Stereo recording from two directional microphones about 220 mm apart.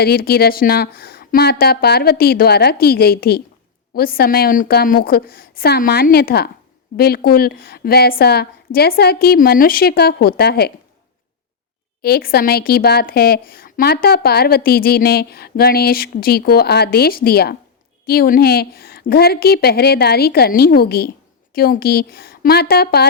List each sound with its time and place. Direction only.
0.0 s a woman's voice: 45° left (ahead or behind)
12.0 s a woman's voice: 45° left (ahead or behind)